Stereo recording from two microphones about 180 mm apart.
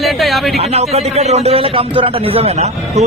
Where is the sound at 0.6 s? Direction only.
35° right (ahead or behind).